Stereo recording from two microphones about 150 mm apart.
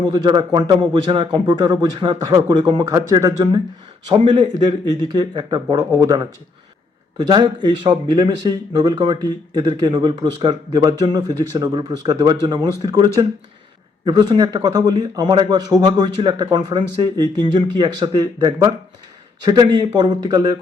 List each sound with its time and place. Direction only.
0.1 s a man's voice: 30° right (ahead or behind)